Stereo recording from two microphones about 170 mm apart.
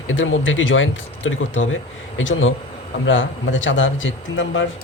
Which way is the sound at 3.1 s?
90° left.